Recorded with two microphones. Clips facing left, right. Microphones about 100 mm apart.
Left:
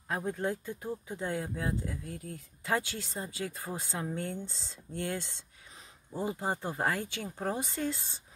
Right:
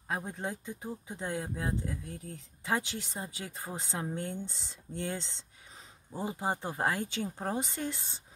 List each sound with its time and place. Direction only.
0.1 s speech: 15° right (ahead or behind)